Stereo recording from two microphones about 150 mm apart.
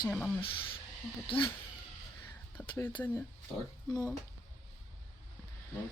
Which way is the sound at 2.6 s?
15° left (ahead or behind).